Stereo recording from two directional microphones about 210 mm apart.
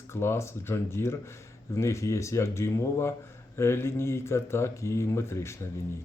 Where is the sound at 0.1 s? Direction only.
10° left (ahead or behind).